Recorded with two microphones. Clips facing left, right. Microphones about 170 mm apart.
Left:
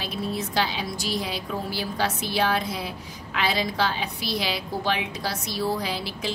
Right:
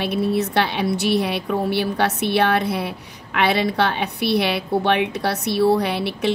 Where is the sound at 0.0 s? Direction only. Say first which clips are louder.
Right 9 dB; 65° right (ahead or behind).